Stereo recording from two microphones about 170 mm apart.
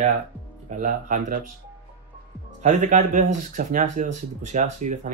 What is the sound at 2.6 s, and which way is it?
Speech, 45° right (ahead or behind).